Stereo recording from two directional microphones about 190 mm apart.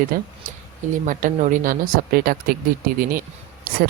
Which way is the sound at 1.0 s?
45° right (ahead or behind).